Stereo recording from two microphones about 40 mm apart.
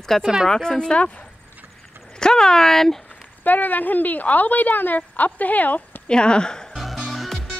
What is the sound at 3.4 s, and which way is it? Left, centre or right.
Speech, left.